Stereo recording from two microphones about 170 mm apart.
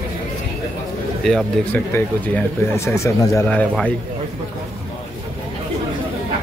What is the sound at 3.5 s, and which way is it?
Speech, 10° left (ahead or behind).